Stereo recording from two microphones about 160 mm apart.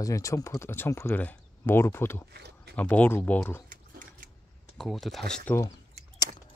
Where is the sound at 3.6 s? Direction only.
55° right (ahead or behind).